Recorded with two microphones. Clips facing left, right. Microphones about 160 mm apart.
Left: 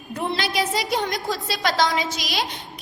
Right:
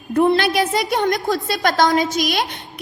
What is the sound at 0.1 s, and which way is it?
A woman's voice, 55° right (ahead or behind).